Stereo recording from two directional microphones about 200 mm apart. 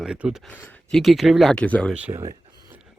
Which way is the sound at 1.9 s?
10° right (ahead or behind).